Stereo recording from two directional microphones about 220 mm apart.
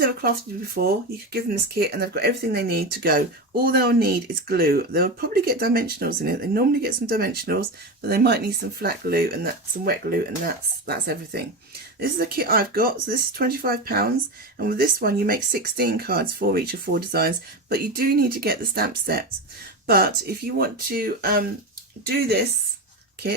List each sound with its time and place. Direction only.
0.0 s speech: 45° right (ahead or behind)